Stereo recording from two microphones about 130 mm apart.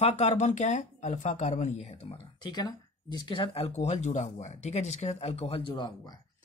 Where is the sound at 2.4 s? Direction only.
35° left (ahead or behind).